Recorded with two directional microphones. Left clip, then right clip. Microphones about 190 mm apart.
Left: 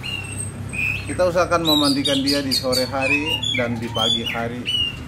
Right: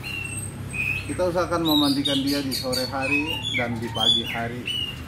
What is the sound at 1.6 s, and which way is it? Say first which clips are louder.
A man's voice: left 3 dB; 15° left (ahead or behind).